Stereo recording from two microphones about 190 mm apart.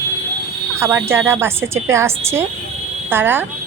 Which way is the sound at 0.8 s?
10° right (ahead or behind).